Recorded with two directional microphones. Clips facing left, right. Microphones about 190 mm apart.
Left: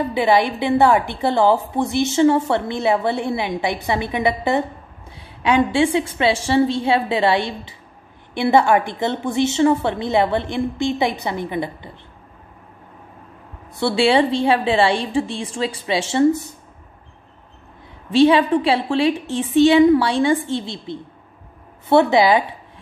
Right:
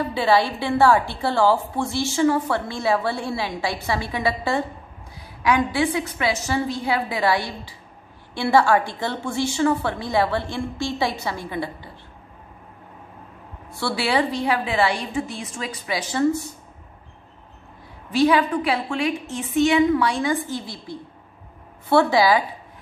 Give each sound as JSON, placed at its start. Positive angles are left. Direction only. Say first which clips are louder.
{"t": 0.0, "sound": "a woman's voice", "louder": "left 3 dB", "side_deg": 20}
{"t": 13.7, "sound": "a woman's voice", "louder": "left 6 dB", "side_deg": 25}
{"t": 18.1, "sound": "a woman's voice", "louder": "left 5 dB", "side_deg": 25}